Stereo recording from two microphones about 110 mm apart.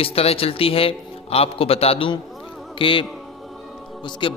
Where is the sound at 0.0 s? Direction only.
65° left (ahead or behind).